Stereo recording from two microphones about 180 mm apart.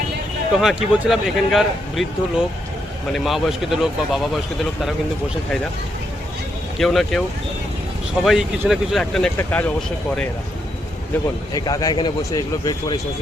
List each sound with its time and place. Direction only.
0.5 s speech: centre (ahead or behind)
3.1 s speech: centre (ahead or behind)
6.7 s speech: centre (ahead or behind)
8.2 s speech: centre (ahead or behind)
11.5 s a man's voice: 20° left (ahead or behind)